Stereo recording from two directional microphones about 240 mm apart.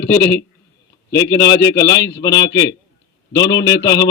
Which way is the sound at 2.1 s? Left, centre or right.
Centre.